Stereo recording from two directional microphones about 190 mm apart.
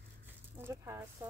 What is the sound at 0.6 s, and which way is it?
Speech, 15° right (ahead or behind).